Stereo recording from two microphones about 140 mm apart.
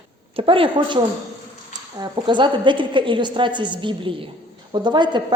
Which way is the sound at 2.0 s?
35° right (ahead or behind).